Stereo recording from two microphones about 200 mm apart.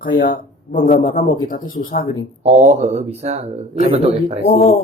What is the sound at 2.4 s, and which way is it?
Speech, 35° right (ahead or behind).